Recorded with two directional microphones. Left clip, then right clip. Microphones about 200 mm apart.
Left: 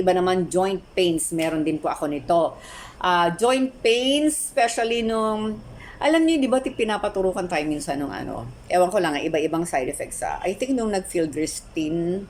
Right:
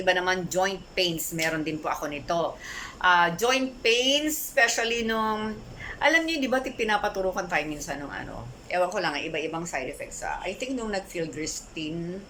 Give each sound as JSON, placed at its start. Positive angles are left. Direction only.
{"t": 0.0, "sound": "a woman's voice", "side_deg": 20}